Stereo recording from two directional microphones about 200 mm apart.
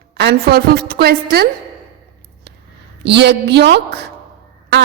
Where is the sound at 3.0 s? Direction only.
55° right (ahead or behind).